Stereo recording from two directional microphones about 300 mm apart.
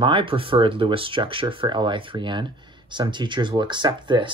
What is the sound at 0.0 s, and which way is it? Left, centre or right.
Speech, centre.